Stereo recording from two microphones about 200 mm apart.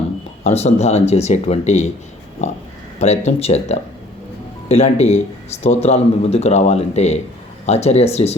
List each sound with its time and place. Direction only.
0.4 s speech: 35° left (ahead or behind)